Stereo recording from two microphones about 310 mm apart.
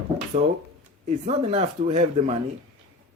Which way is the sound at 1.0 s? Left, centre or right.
Right.